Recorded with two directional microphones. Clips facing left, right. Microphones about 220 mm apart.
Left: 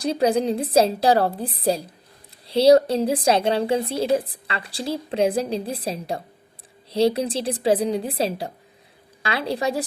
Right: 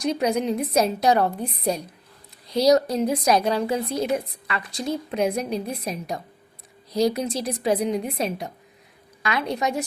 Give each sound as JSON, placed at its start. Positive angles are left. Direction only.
{"t": 0.0, "sound": "a woman's voice", "side_deg": 30}